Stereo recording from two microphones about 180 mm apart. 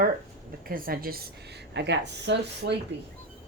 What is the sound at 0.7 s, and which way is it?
Speech, 55° right (ahead or behind).